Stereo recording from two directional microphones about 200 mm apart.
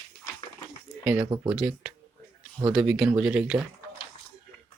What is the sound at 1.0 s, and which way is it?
Speech, 5° right (ahead or behind).